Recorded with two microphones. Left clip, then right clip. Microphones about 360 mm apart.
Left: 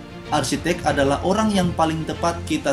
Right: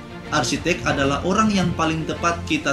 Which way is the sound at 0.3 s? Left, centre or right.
Left.